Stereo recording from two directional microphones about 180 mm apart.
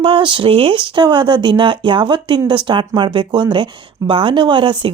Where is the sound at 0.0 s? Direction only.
30° right (ahead or behind).